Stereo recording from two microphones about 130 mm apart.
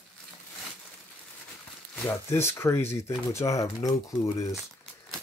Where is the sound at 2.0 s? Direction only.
20° left (ahead or behind).